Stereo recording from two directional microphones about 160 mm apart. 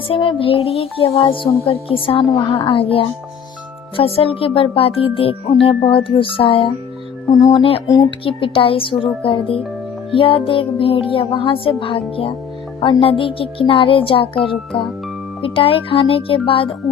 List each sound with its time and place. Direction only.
0.1 s speech: 35° left (ahead or behind)